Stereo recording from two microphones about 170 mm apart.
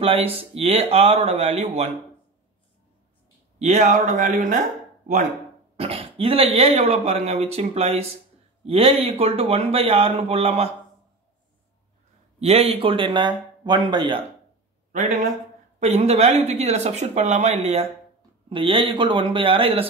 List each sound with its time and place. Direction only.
0.0 s speech: 35° right (ahead or behind)
3.5 s speech: 45° right (ahead or behind)
5.8 s speech: 35° right (ahead or behind)
12.4 s speech: 40° right (ahead or behind)
14.9 s a man's voice: 45° right (ahead or behind)